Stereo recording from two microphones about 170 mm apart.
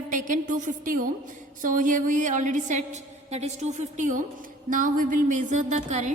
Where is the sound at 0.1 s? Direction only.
50° right (ahead or behind).